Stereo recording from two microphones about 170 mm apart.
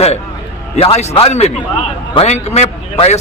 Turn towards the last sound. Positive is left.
turn(degrees=40)  # may be behind; listen again after turning